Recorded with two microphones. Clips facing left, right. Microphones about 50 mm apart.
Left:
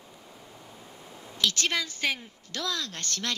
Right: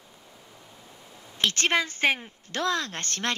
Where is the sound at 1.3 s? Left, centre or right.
Right.